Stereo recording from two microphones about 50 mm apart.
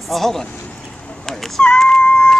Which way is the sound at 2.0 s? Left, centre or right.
Left.